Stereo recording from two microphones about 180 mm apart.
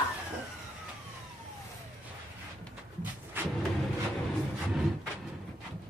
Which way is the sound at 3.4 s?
10° right (ahead or behind).